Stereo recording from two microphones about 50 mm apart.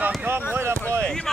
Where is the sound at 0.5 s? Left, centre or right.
Right.